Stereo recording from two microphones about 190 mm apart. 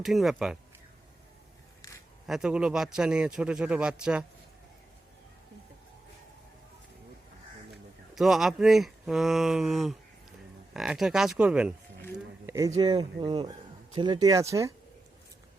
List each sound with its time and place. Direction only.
0.0 s a man's voice: centre (ahead or behind)
2.2 s a man's voice: 5° right (ahead or behind)
8.1 s a man's voice: centre (ahead or behind)